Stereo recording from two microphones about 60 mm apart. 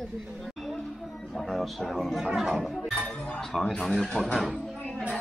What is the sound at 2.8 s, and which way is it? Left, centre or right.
Chink, centre.